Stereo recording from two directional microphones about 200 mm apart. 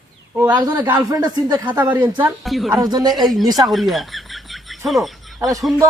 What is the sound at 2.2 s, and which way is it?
Speech, centre (ahead or behind).